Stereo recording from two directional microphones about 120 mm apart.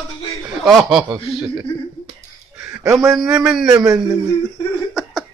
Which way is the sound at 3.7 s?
30° right (ahead or behind).